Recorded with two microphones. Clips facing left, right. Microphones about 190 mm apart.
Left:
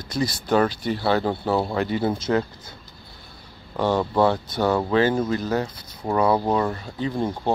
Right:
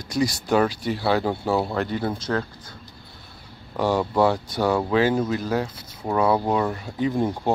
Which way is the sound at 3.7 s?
5° right (ahead or behind).